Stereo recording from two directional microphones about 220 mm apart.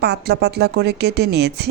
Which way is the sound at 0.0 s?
50° right (ahead or behind).